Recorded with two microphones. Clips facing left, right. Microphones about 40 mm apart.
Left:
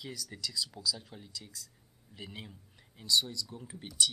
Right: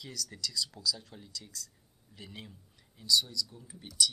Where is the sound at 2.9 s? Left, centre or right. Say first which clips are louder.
Right 1 dB; left.